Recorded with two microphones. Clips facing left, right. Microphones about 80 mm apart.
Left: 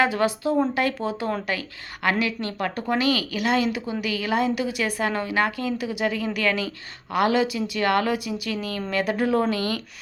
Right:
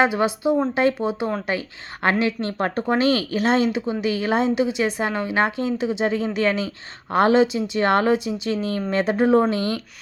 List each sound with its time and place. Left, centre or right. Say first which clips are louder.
0.0 s a woman's voice: right 2 dB; right